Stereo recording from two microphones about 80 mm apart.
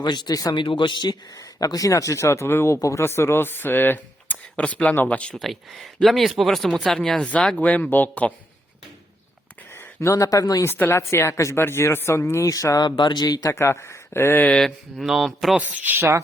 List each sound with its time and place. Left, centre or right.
0.0 s a man's voice: left
0.5 s speech: left
1.4 s speech: left; by 5.4 s centre
5.4 s speech: centre
7.3 s speech: centre
9.7 s speech: left
10.6 s speech: left
13.0 s speech: left
13.2 s speech: left
13.5 s speech: left
14.5 s speech: centre
15.5 s speech: right